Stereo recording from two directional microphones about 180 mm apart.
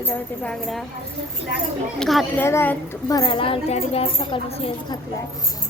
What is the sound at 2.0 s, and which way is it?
Speech, centre (ahead or behind).